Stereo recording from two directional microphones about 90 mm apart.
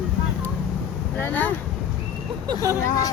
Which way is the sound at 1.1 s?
20° left (ahead or behind).